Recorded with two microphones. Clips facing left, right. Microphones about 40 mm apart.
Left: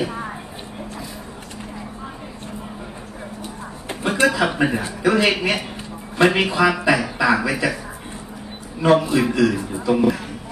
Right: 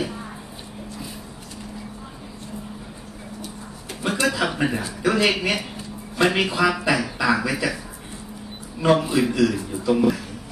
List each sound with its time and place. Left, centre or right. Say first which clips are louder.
3.9 s a sound: left 3 dB; left
4.3 s speech: left 3 dB; centre
8.8 s speech: left 3 dB; centre